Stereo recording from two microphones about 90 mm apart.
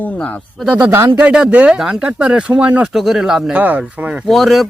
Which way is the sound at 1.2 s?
10° right (ahead or behind).